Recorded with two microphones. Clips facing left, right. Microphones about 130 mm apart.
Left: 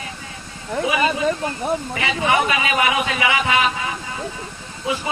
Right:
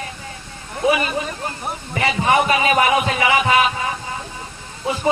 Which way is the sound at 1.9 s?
35° right (ahead or behind).